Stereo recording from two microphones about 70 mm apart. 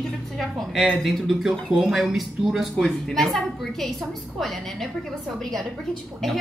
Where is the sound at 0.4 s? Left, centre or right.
Centre.